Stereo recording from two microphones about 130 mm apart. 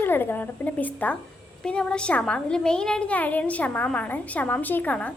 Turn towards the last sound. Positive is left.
turn(degrees=10)  # may be behind; listen again after turning